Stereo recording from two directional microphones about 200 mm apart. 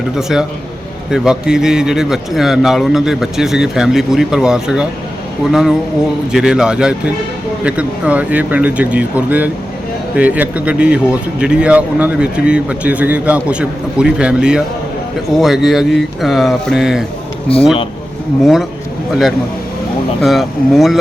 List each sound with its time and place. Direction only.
0.2 s speech: centre (ahead or behind)
17.5 s speech: 30° left (ahead or behind)
20.2 s speech: centre (ahead or behind)